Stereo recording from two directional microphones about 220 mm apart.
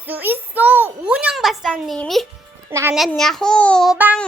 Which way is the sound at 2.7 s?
10° right (ahead or behind).